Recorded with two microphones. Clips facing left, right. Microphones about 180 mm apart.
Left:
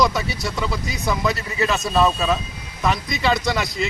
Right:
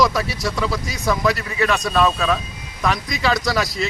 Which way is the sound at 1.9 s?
25° left (ahead or behind).